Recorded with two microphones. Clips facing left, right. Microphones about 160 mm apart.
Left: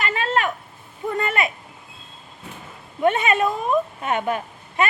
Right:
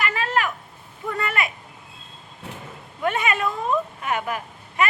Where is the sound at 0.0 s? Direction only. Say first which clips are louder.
Left 1 dB; 25° left (ahead or behind).